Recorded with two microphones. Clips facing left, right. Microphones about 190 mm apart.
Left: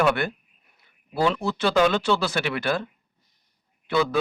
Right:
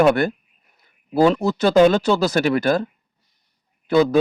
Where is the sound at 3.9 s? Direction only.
40° right (ahead or behind).